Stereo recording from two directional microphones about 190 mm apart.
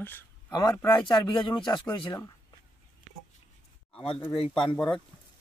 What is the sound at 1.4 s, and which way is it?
Speech, 25° left (ahead or behind).